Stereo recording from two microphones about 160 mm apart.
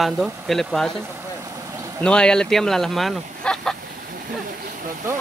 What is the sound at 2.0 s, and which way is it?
Speech, 5° left (ahead or behind).